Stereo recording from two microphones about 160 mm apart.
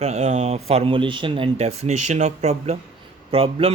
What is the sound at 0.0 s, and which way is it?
Speech, 45° right (ahead or behind).